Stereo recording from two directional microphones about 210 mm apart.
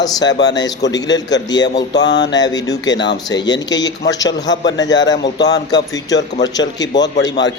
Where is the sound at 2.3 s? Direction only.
20° left (ahead or behind).